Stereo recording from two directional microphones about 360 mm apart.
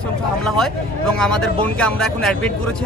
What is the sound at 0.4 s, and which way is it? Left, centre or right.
Speech, centre.